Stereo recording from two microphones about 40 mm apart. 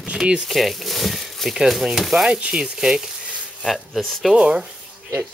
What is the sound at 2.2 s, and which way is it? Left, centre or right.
Speech, right.